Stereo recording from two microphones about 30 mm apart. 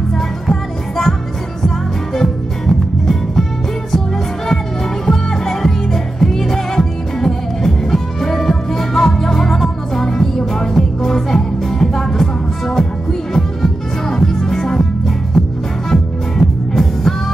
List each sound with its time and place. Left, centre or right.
0.1 s music: centre
2.1 s music: centre
5.0 s music: centre
15.3 s music: centre